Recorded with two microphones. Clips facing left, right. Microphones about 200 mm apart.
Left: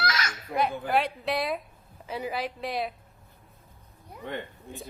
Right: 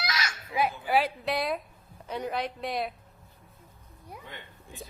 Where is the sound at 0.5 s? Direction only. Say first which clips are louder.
Left 1 dB; 60° left (ahead or behind).